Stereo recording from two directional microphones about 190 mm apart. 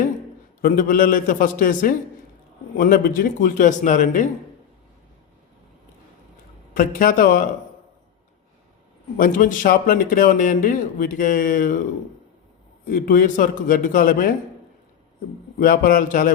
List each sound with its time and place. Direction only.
0.6 s speech: 50° left (ahead or behind)
6.7 s speech: 45° left (ahead or behind)
9.1 s speech: 45° left (ahead or behind)
12.8 s speech: 45° left (ahead or behind)
15.5 s speech: 50° left (ahead or behind)